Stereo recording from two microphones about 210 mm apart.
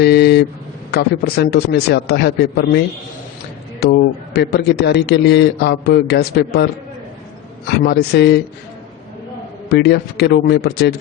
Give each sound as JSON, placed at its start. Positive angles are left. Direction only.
{"t": 0.0, "sound": "a sound", "side_deg": 50}
{"t": 0.9, "sound": "a man's voice", "side_deg": 50}
{"t": 4.4, "sound": "a man's voice", "side_deg": 50}
{"t": 7.9, "sound": "a man's voice", "side_deg": 50}
{"t": 9.6, "sound": "a man's voice", "side_deg": 50}